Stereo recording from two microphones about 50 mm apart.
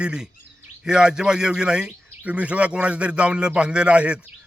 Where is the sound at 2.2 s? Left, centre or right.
Right.